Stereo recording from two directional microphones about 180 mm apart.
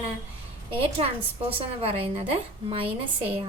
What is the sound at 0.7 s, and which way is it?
A woman's voice, 30° right (ahead or behind).